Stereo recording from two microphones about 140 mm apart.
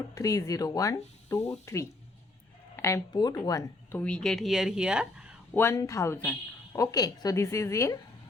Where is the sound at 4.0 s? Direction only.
5° left (ahead or behind).